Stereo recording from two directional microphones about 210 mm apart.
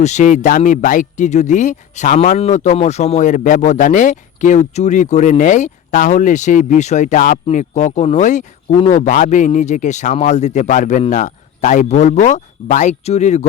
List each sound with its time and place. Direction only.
0.0 s speech: 35° left (ahead or behind)
8.7 s speech: 25° left (ahead or behind)
9.0 s speech: 35° left (ahead or behind)